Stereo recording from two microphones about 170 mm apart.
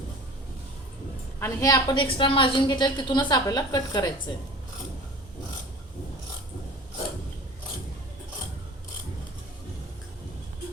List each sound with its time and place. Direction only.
1.4 s a woman's voice: 20° left (ahead or behind)